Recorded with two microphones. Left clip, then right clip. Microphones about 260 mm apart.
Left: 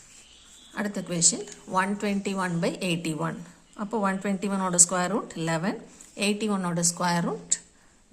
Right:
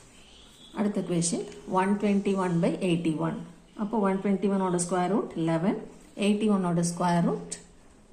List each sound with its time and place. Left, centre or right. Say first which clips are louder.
0.7 s a woman's voice: right 2 dB; left